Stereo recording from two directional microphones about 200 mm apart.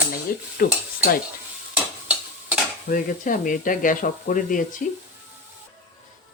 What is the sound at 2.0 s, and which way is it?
Stir, 5° right (ahead or behind).